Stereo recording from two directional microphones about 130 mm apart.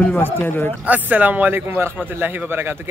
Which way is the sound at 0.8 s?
10° right (ahead or behind).